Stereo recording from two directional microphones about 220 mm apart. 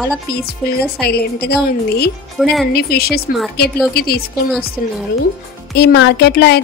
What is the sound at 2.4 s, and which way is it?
Speech, centre (ahead or behind).